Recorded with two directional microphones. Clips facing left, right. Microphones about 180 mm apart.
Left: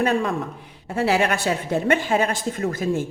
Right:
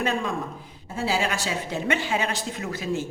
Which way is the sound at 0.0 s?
60° left (ahead or behind).